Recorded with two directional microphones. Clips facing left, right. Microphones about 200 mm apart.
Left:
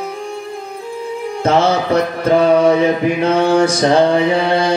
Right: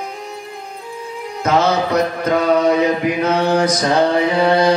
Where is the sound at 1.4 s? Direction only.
30° left (ahead or behind).